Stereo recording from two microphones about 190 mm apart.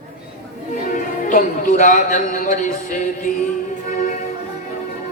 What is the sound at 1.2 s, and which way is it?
Speech, 45° left (ahead or behind).